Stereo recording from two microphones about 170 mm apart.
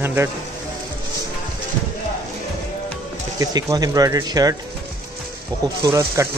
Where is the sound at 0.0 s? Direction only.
15° right (ahead or behind).